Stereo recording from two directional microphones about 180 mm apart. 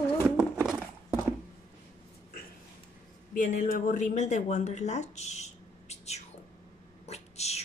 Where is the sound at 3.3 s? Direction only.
45° left (ahead or behind).